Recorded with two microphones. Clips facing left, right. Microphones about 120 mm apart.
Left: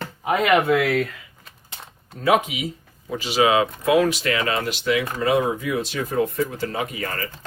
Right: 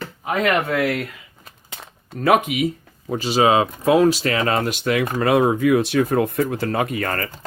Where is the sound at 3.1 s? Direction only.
35° right (ahead or behind).